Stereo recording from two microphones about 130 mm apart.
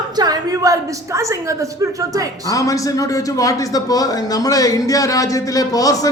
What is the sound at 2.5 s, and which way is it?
A man's voice, 25° left (ahead or behind).